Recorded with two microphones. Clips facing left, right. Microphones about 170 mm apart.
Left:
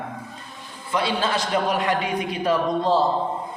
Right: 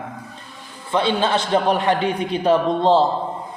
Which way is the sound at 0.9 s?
25° right (ahead or behind).